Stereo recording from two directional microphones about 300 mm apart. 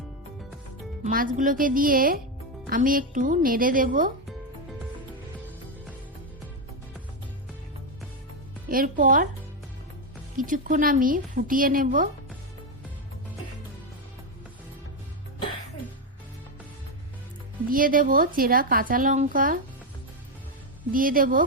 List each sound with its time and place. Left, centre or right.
1.0 s a woman's voice: right
8.7 s a woman's voice: right
10.3 s a woman's voice: right
17.7 s a woman's voice: right
20.9 s a woman's voice: right